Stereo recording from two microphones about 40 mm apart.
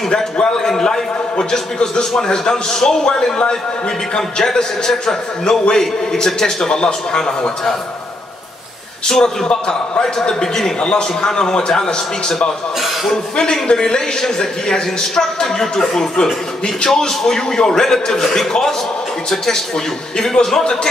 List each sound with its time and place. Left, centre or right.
0.1 s a man's voice: centre
9.2 s a man's voice: centre